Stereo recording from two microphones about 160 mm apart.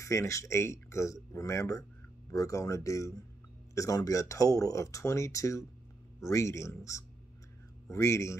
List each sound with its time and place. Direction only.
0.0 s speech: 20° left (ahead or behind)